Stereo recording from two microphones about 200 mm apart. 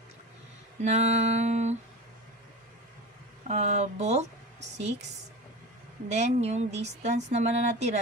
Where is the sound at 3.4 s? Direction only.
35° right (ahead or behind).